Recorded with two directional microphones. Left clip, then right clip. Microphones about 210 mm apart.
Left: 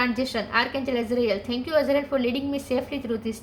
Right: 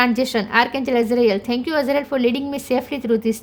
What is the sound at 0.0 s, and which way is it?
A woman's voice, 50° right (ahead or behind).